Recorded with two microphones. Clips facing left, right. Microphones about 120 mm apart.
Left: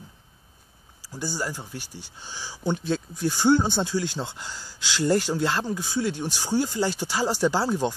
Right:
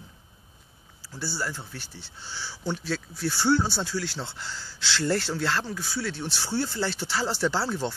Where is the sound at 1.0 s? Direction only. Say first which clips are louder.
Left 2 dB; 15° left (ahead or behind).